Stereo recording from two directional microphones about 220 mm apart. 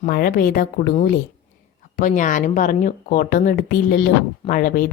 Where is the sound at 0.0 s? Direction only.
45° left (ahead or behind).